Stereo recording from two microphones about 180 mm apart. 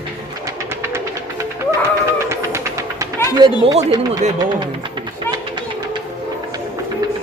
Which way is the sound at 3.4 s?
25° right (ahead or behind).